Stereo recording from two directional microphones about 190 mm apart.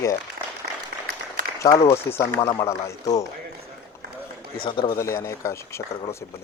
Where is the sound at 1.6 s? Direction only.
15° left (ahead or behind).